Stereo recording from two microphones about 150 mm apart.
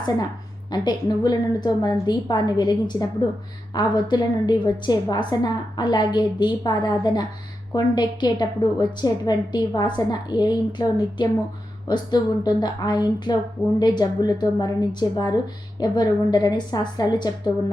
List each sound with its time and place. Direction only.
0.7 s a woman's voice: 25° left (ahead or behind)